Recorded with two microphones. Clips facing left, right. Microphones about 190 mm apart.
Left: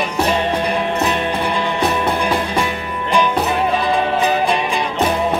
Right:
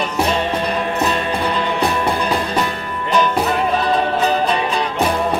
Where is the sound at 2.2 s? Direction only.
10° left (ahead or behind).